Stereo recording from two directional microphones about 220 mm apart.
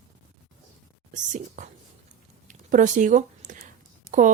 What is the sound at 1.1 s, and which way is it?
Speech, 35° right (ahead or behind).